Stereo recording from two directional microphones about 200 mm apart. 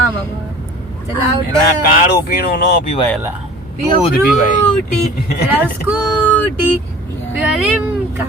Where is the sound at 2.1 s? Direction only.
50° left (ahead or behind).